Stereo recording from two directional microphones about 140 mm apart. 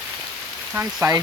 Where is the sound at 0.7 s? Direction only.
15° right (ahead or behind).